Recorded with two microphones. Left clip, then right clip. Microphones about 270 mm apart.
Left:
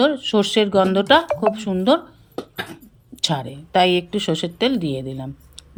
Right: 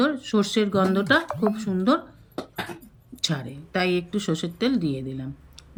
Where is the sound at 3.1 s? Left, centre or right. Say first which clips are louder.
Left 6 dB; centre.